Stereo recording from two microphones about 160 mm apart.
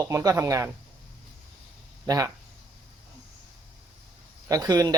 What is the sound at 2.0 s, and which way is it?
Speech, 20° right (ahead or behind).